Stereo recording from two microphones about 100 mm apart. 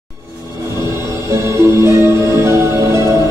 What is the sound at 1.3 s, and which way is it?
Music, 30° right (ahead or behind).